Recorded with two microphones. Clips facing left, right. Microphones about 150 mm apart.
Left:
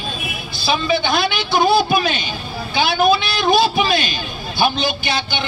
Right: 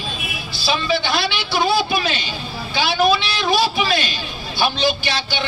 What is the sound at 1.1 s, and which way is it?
Speech, 50° left (ahead or behind).